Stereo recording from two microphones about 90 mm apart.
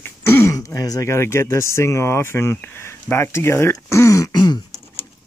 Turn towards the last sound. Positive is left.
turn(degrees=50)  # may be behind; listen again after turning